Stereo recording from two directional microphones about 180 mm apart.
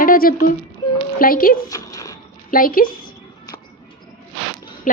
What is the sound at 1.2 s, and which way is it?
Speech, 50° left (ahead or behind).